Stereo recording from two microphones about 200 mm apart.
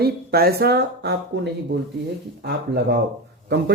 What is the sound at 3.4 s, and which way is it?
Speech, 55° right (ahead or behind).